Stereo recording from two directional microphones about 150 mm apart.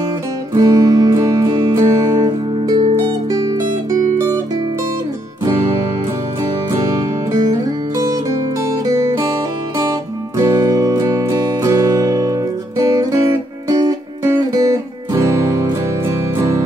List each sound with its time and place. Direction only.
0.6 s music: 25° right (ahead or behind)
7.3 s music: 25° right (ahead or behind)
10.3 s music: 25° right (ahead or behind)